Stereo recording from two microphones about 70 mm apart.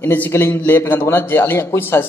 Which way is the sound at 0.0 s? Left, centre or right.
Left.